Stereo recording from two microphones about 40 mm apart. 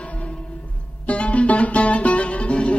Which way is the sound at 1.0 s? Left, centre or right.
Left.